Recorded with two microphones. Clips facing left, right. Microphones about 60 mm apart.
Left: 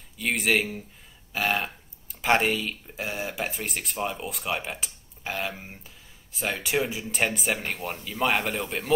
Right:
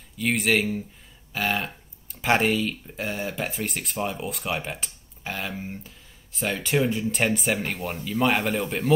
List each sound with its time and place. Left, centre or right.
0.2 s speech: centre